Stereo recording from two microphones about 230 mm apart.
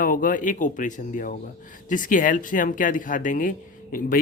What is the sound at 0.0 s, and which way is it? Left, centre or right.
Speech, left.